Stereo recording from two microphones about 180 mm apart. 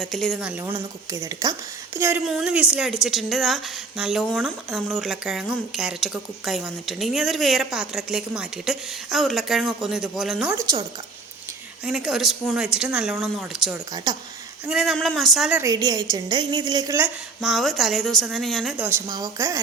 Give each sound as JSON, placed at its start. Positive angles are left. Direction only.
{"t": 0.0, "sound": "a woman's voice", "side_deg": 5}
{"t": 0.3, "sound": "a woman's voice", "side_deg": -10}
{"t": 11.9, "sound": "a woman's voice", "side_deg": 0}
{"t": 13.9, "sound": "a woman's voice", "side_deg": -20}
{"t": 14.7, "sound": "a woman's voice", "side_deg": 0}
{"t": 15.6, "sound": "a woman's voice", "side_deg": -20}
{"t": 17.4, "sound": "a woman's voice", "side_deg": 0}
{"t": 18.9, "sound": "a woman's voice", "side_deg": -20}